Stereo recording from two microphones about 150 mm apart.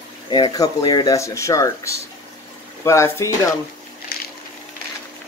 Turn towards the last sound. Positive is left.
turn(degrees=90)